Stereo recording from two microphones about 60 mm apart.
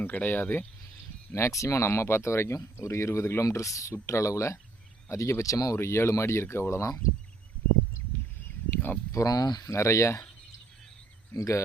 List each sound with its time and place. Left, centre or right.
0.0 s speech: left
1.3 s speech: left
5.7 s speech: left
8.4 s a sound: left
9.1 s speech: left
9.7 s speech: left
11.3 s speech: left